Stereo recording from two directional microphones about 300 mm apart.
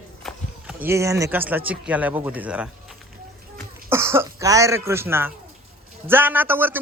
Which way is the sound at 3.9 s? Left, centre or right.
Centre.